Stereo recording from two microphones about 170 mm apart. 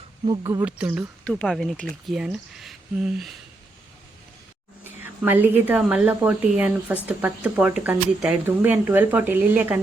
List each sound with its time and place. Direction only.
0.3 s speech: 30° right (ahead or behind)
0.6 s speech: 5° right (ahead or behind)
1.2 s speech: 5° left (ahead or behind)
4.8 s speech: 10° right (ahead or behind)